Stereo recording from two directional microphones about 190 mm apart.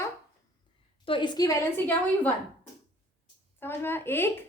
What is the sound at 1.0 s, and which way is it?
Speech, 25° left (ahead or behind).